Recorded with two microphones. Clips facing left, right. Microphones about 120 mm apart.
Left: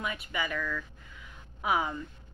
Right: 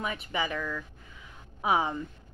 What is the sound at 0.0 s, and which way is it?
A woman's voice, 30° right (ahead or behind).